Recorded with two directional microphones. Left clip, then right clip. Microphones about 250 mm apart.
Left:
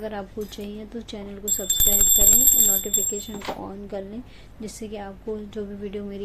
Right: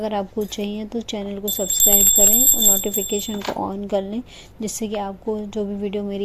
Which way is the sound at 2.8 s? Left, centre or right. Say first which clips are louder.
Right 4 dB; right.